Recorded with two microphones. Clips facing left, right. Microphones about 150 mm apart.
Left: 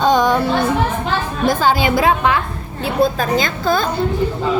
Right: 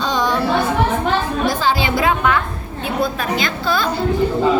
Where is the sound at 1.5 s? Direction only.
50° left (ahead or behind).